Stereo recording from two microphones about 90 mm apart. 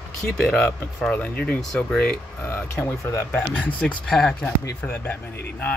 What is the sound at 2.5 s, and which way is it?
Speech, 25° left (ahead or behind).